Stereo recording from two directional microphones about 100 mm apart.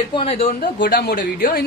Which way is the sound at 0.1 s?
80° left.